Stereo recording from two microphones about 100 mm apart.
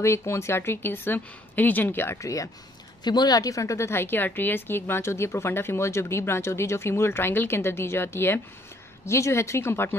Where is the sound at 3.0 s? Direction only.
45° left (ahead or behind).